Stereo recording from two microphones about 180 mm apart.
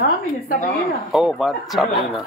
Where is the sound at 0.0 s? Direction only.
50° left (ahead or behind).